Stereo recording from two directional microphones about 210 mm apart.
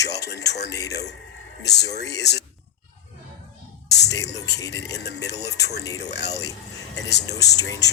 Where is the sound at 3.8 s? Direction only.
55° left (ahead or behind).